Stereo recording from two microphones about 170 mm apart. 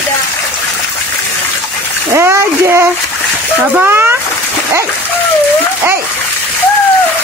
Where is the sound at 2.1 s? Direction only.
15° right (ahead or behind).